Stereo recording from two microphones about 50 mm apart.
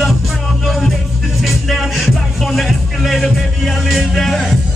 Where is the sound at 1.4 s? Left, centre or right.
Centre.